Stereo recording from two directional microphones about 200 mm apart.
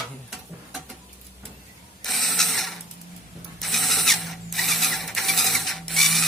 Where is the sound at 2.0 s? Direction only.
Centre (ahead or behind).